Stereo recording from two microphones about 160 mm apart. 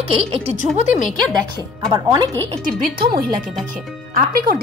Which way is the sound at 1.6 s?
25° right (ahead or behind).